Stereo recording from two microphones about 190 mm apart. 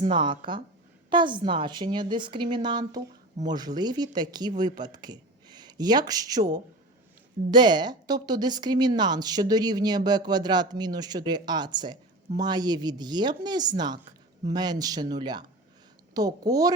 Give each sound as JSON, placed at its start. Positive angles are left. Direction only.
{"t": 0.1, "sound": "a woman's voice", "side_deg": -25}